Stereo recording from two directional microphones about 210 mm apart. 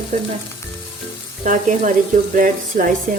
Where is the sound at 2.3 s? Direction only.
40° right (ahead or behind).